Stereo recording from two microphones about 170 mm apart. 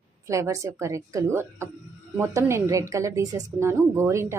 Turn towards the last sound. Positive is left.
turn(degrees=-15)  # may be behind; listen again after turning